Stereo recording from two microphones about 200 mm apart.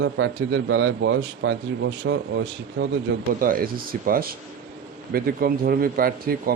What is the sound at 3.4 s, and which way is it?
A man's voice, 45° right (ahead or behind).